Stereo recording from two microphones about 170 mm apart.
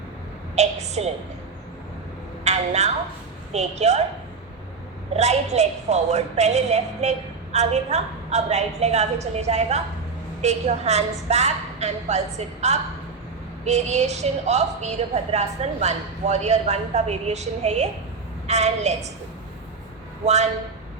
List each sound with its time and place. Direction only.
0.5 s a sound: 40° right (ahead or behind)
2.4 s a woman's voice: 40° right (ahead or behind)
5.1 s a woman's voice: 40° right (ahead or behind)
20.2 s a woman's voice: 40° right (ahead or behind)